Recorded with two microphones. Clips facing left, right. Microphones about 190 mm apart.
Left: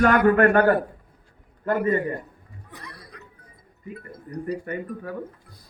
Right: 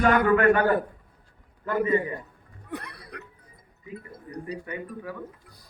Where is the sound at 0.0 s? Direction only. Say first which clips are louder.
Left 3 dB; 50° left (ahead or behind).